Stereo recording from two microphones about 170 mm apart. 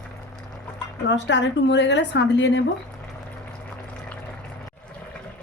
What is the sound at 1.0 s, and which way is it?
A woman's voice, 90° left.